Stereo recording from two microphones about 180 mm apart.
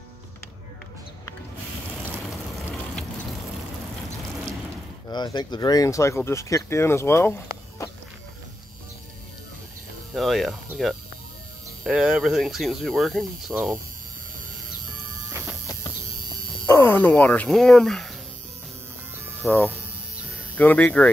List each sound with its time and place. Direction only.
2.1 s vehicle: centre (ahead or behind)
5.1 s speech: 25° left (ahead or behind)
10.1 s speech: centre (ahead or behind)
16.6 s speech: 15° left (ahead or behind)
19.4 s speech: 10° left (ahead or behind)